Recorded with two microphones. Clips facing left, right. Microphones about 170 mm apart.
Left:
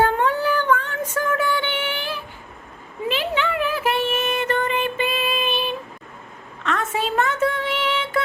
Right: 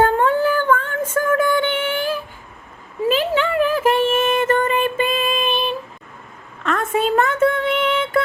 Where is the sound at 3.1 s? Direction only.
45° right (ahead or behind).